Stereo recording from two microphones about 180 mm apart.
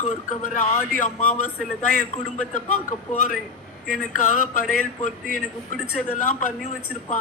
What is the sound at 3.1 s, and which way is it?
Speech, 45° left (ahead or behind).